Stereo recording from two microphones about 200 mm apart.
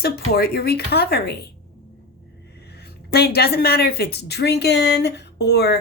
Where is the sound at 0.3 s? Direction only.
50° left (ahead or behind).